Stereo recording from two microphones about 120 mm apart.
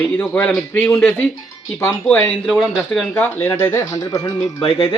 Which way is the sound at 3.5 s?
20° left (ahead or behind).